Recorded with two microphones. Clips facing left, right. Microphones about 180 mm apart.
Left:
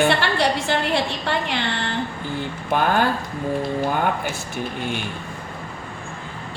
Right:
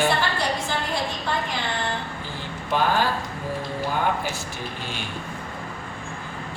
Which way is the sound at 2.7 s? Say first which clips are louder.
Left 2 dB; 55° left (ahead or behind).